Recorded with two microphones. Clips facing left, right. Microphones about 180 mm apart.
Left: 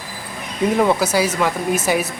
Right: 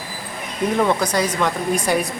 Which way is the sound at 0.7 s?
5° left (ahead or behind).